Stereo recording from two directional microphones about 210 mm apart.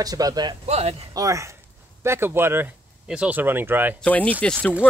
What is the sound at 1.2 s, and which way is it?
Speech, 15° right (ahead or behind).